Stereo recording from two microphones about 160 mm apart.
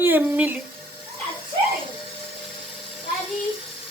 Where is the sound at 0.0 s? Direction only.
10° right (ahead or behind).